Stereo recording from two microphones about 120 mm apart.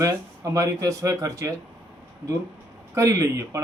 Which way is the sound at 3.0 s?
25° right (ahead or behind).